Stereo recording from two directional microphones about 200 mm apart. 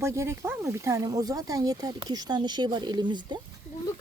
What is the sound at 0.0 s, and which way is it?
Speech, 15° right (ahead or behind).